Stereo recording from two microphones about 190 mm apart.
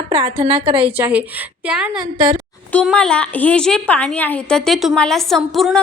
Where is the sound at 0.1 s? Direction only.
30° right (ahead or behind).